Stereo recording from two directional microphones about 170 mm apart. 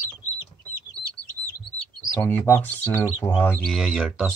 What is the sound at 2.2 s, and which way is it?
Speech, 10° left (ahead or behind).